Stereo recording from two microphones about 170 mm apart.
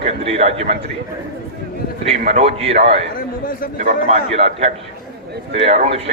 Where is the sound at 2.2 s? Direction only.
45° right (ahead or behind).